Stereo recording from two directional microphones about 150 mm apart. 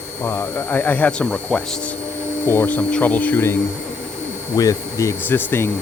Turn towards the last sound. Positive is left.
turn(degrees=15)  # may be behind; listen again after turning